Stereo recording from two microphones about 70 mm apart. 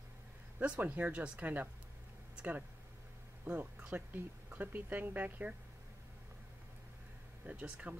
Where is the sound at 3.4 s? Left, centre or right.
Right.